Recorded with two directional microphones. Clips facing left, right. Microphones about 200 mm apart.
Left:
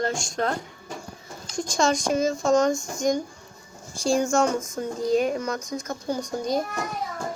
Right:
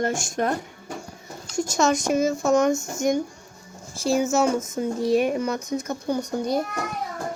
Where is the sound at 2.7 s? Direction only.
25° right (ahead or behind).